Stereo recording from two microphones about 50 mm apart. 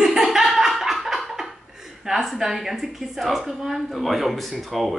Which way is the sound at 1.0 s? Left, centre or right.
Centre.